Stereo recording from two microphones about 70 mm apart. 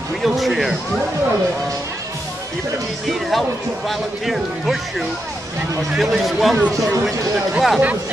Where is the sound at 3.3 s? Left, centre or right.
Centre.